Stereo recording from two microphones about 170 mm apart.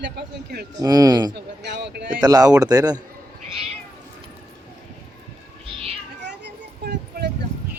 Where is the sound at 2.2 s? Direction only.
20° right (ahead or behind).